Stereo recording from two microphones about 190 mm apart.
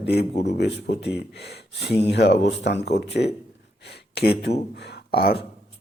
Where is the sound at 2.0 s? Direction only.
60° left (ahead or behind).